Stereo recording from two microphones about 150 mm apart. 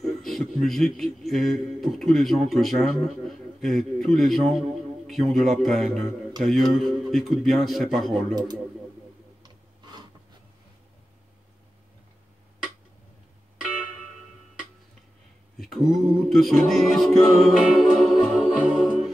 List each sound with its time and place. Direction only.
0.2 s speech: centre (ahead or behind)
9.4 s rub: 30° right (ahead or behind)
15.6 s a capella: centre (ahead or behind)